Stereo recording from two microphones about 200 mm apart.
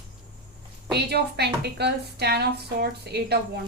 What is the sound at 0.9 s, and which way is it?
A woman's voice, 55° right (ahead or behind).